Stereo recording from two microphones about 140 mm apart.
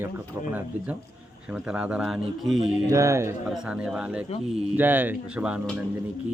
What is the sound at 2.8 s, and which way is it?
Speech, 20° right (ahead or behind).